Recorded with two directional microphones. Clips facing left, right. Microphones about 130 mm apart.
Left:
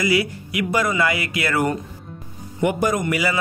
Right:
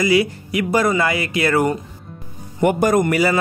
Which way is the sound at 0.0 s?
30° right (ahead or behind).